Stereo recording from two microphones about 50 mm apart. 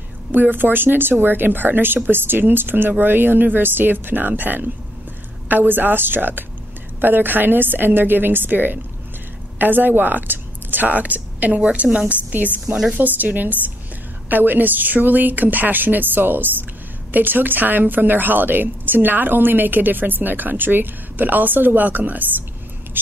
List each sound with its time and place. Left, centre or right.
0.3 s a woman's voice: right